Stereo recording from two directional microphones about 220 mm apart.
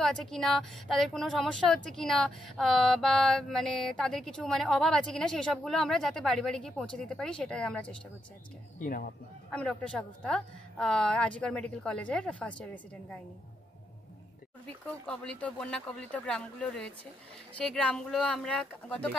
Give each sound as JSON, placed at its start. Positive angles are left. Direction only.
{"t": 0.0, "sound": "speech", "side_deg": 0}
{"t": 8.7, "sound": "speech", "side_deg": 40}
{"t": 9.5, "sound": "speech", "side_deg": 5}
{"t": 14.7, "sound": "speech", "side_deg": 5}